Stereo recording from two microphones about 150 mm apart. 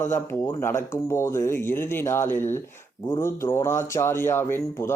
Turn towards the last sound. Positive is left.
turn(degrees=15)  # may be behind; listen again after turning